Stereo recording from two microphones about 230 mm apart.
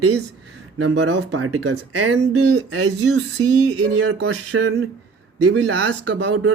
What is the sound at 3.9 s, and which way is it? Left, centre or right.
Speech, right.